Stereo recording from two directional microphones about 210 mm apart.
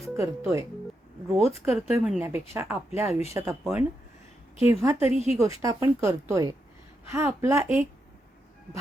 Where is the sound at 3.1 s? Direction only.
30° left (ahead or behind).